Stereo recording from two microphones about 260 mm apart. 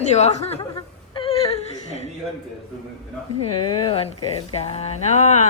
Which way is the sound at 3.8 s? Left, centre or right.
Left.